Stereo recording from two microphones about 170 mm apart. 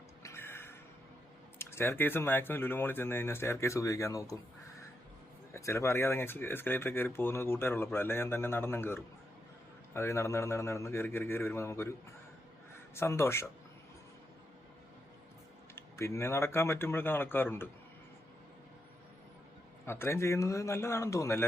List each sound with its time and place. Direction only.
0.2 s a sound: 15° left (ahead or behind)
1.5 s speech: 15° left (ahead or behind)
5.5 s speech: 15° left (ahead or behind)
15.7 s speech: 15° left (ahead or behind)
19.8 s speech: 15° left (ahead or behind)